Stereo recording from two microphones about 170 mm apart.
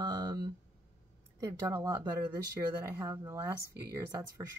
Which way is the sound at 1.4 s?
25° right (ahead or behind).